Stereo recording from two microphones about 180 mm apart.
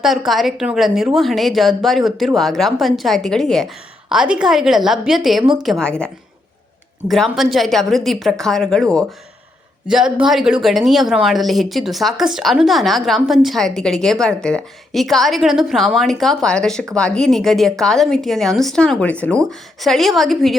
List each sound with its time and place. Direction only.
0.3 s speech: centre (ahead or behind)
7.1 s speech: centre (ahead or behind)